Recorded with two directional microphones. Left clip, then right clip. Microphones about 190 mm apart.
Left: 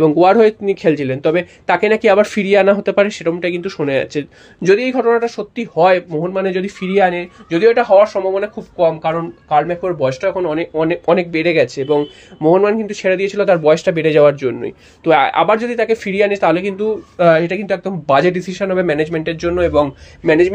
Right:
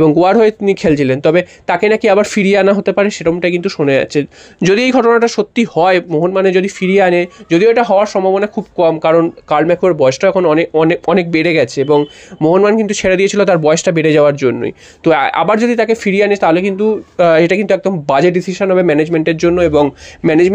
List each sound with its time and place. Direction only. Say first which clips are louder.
0.0 s speech: right 1 dB; 35° right (ahead or behind)
4.7 s speech: right 7 dB; 45° right (ahead or behind); by 16.9 s 25° right (ahead or behind)
17.2 s speech: right 3 dB; 40° right (ahead or behind)